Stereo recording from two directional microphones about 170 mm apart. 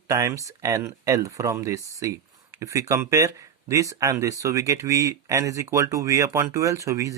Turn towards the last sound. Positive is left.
turn(degrees=-20)  # may be behind; listen again after turning